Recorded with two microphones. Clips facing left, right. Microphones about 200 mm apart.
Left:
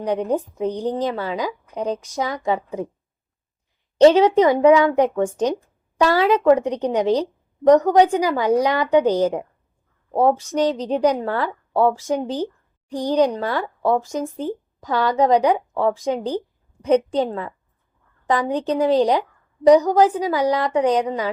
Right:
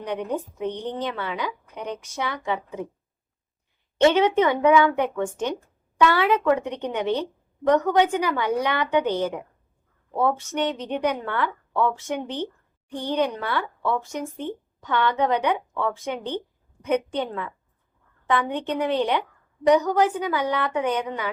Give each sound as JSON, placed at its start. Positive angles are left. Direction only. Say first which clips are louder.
{"t": 0.0, "sound": "a woman's voice", "louder": "left 6 dB", "side_deg": 35}
{"t": 4.0, "sound": "a woman's voice", "louder": "left 6 dB", "side_deg": 35}